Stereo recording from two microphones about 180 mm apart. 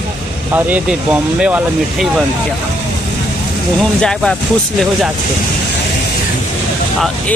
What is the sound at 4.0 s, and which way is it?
Speech, 5° left (ahead or behind).